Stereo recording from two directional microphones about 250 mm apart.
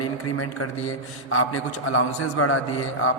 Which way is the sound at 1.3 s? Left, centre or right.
Left.